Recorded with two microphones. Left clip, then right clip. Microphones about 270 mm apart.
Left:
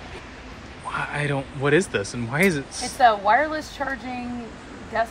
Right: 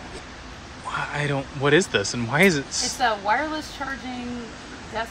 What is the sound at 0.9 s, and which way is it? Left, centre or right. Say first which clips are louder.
Speech: even; centre.